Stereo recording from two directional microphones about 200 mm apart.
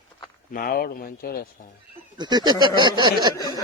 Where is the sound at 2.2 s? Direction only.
20° right (ahead or behind).